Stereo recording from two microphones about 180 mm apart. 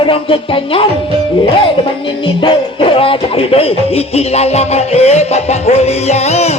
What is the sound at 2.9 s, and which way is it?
Music, 30° left (ahead or behind).